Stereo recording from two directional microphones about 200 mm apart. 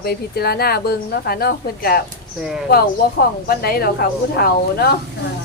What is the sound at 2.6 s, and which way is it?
Speech, 50° left (ahead or behind).